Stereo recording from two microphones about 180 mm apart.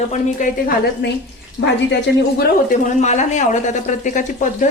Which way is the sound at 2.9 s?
40° left (ahead or behind).